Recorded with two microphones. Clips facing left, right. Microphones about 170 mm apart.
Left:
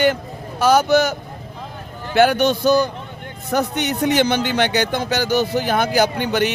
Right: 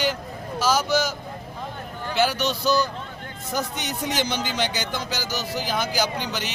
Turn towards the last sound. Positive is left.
turn(degrees=60)  # may be behind; listen again after turning